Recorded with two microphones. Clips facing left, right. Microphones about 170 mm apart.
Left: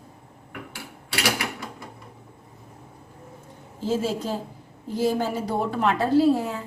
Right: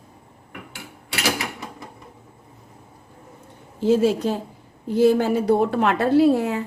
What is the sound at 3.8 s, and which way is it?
Speech, 70° right (ahead or behind).